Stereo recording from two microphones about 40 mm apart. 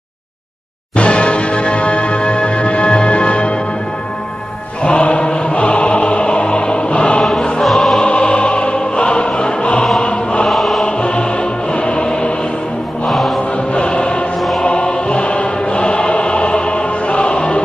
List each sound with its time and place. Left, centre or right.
0.9 s music: left
4.8 s music: left
7.6 s music: centre
8.0 s music: left
10.5 s music: centre
10.8 s music: left
13.1 s music: centre
13.7 s choir: left